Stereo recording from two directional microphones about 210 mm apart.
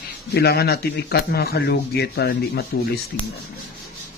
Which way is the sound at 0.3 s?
50° left (ahead or behind).